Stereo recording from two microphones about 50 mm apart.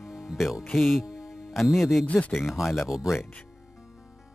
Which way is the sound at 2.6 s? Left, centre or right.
Left.